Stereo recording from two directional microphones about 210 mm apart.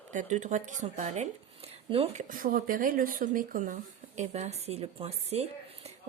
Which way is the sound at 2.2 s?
40° right (ahead or behind).